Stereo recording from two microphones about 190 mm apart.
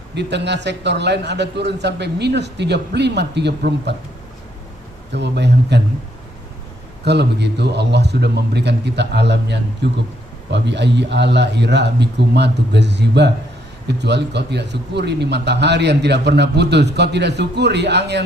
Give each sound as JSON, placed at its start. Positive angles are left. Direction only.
{"t": 0.1, "sound": "a man's voice", "side_deg": -65}
{"t": 5.1, "sound": "a man's voice", "side_deg": -65}
{"t": 7.0, "sound": "a man's voice", "side_deg": -60}